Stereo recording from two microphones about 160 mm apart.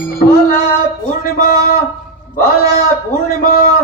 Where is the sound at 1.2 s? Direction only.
65° left (ahead or behind).